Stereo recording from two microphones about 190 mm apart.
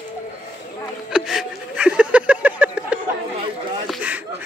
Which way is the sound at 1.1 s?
5° right (ahead or behind).